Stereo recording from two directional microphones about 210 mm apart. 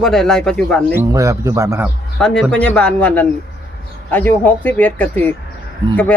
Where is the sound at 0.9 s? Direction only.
15° right (ahead or behind).